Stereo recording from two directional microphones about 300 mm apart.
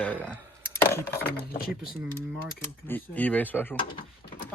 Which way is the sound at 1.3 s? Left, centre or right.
Left.